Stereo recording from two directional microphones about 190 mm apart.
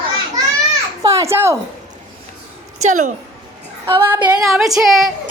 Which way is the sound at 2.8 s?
40° right (ahead or behind).